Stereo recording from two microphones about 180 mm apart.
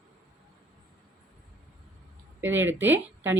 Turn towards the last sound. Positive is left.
turn(degrees=-10)  # may be behind; listen again after turning